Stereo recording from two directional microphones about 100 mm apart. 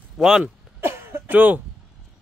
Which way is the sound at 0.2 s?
5° right (ahead or behind).